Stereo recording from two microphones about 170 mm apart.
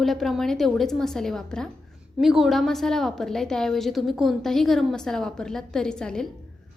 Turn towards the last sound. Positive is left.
turn(degrees=5)  # may be behind; listen again after turning